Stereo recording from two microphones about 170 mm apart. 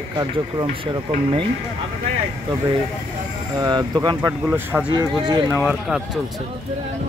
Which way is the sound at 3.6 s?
25° right (ahead or behind).